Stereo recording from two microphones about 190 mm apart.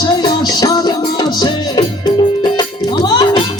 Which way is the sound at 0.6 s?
20° left (ahead or behind).